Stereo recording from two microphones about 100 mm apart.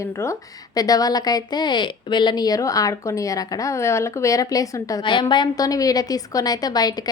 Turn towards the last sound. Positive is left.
turn(degrees=40)  # may be behind; listen again after turning